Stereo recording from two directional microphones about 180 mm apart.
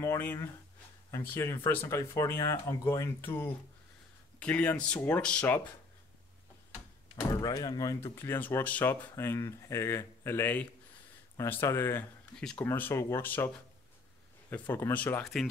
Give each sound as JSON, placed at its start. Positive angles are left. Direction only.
{"t": 0.0, "sound": "speech", "side_deg": 15}
{"t": 7.2, "sound": "speech", "side_deg": 20}
{"t": 14.5, "sound": "speech", "side_deg": 10}